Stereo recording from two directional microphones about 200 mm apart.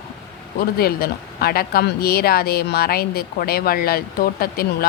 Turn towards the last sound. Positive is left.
turn(degrees=50)  # may be behind; listen again after turning